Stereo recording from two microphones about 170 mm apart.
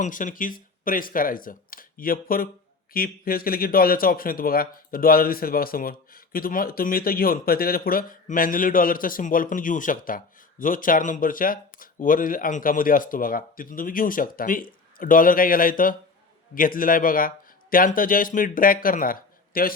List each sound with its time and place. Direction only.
0.0 s a man's voice: 50° left (ahead or behind)